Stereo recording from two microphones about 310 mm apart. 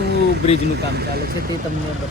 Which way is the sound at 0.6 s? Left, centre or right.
Right.